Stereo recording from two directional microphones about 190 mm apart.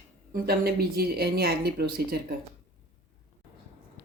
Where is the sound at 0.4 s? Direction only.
55° right (ahead or behind).